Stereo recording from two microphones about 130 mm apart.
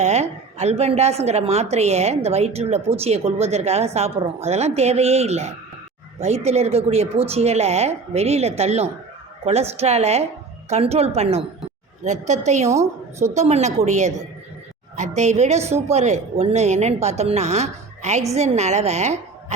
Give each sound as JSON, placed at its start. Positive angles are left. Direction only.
{"t": 0.0, "sound": "a woman's voice", "side_deg": -55}
{"t": 12.0, "sound": "a woman's voice", "side_deg": -65}